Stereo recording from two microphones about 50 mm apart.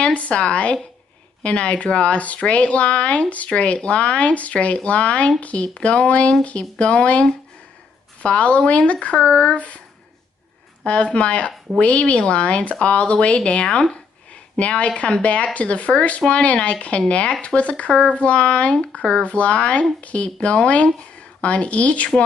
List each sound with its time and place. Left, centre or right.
0.0 s speech: left
10.8 s speech: left